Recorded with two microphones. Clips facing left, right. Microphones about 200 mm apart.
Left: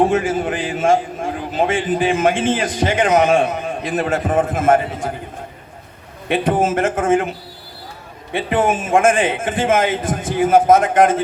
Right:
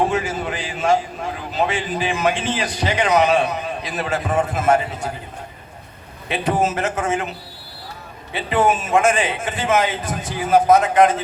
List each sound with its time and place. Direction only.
0.1 s a man's voice: 50° left (ahead or behind)
6.2 s a man's voice: 50° left (ahead or behind)
8.3 s a man's voice: 50° left (ahead or behind)